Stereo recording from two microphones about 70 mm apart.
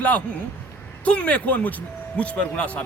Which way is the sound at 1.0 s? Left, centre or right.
Centre.